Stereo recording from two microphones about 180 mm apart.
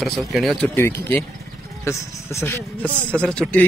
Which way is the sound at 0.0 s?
Centre (ahead or behind).